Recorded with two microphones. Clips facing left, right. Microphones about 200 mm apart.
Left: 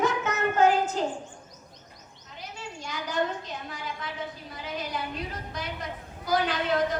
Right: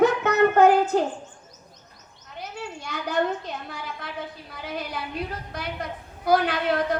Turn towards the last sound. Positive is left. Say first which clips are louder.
# right 2 dB
turn(degrees=-60)  # may be behind; listen again after turning